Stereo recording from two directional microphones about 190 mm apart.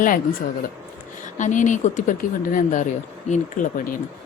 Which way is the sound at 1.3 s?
40° left (ahead or behind).